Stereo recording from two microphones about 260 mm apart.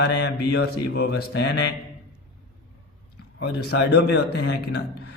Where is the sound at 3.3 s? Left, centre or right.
Left.